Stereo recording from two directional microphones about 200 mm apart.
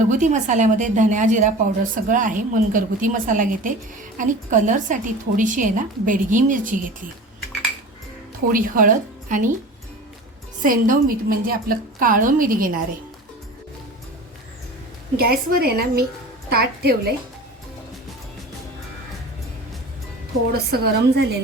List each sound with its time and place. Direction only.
0.1 s a woman's voice: 40° right (ahead or behind)
8.5 s a woman's voice: 45° right (ahead or behind)
10.6 s a woman's voice: 40° right (ahead or behind)
15.1 s a woman's voice: 50° right (ahead or behind)
20.5 s a woman's voice: 50° right (ahead or behind)